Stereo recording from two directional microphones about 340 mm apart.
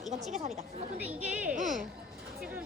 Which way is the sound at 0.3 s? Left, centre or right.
Centre.